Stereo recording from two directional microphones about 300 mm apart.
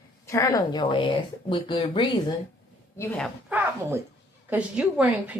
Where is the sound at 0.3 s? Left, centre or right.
Centre.